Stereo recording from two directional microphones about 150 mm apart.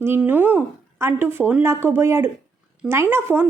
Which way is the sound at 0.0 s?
15° right (ahead or behind).